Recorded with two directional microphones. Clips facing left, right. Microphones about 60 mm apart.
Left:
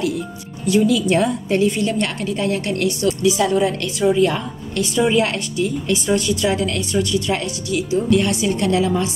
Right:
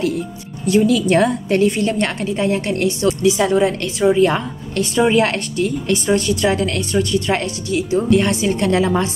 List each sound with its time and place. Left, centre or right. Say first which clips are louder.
0.7 s a woman's voice: right 2 dB; right
2.4 s a woman's voice: right 2 dB; right